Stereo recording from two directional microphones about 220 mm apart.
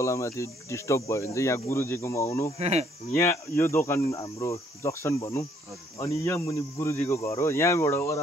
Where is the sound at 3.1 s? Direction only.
10° left (ahead or behind).